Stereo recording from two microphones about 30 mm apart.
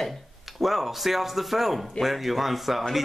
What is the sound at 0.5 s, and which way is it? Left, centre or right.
Speech, centre.